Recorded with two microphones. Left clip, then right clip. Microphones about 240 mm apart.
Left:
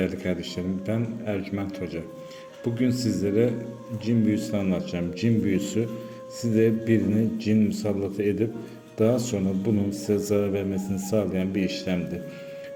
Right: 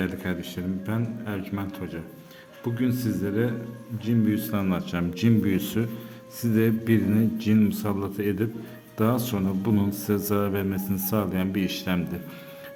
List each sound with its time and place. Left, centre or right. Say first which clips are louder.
0.0 s a man's voice: left 3 dB; centre
3.0 s a man's voice: left 4 dB; centre
9.0 s speech: left 3 dB; centre